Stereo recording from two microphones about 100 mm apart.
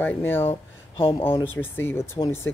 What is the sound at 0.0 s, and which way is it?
Speech, 20° left (ahead or behind).